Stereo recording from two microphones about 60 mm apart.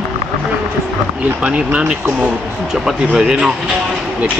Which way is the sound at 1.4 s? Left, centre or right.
Right.